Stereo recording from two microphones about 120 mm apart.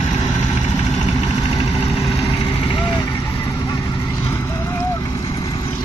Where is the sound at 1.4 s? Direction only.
50° left (ahead or behind).